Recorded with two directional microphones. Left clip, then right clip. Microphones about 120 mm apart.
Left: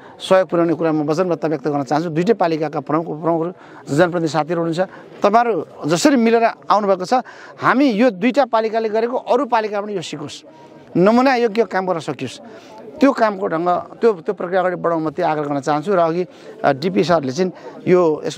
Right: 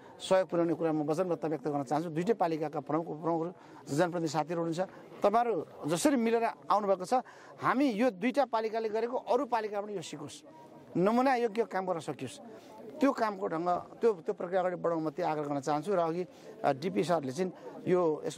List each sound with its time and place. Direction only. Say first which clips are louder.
0.2 s speech: left 13 dB; 35° left (ahead or behind)